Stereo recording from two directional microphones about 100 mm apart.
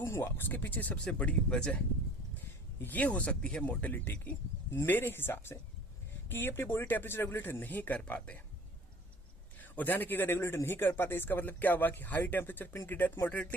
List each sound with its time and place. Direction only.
0.0 s speech: 25° left (ahead or behind)
2.8 s a man's voice: 15° left (ahead or behind)
9.6 s a man's voice: 15° left (ahead or behind)